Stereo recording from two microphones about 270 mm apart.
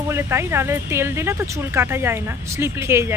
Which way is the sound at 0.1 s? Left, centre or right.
Centre.